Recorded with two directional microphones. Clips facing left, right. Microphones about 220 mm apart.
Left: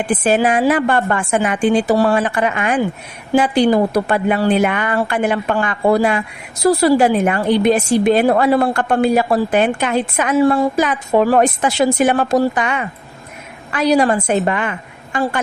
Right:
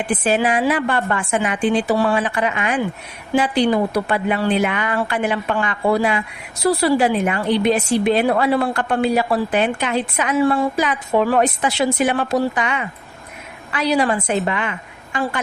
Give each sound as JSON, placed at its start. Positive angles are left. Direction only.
{"t": 0.1, "sound": "a woman's voice", "side_deg": 45}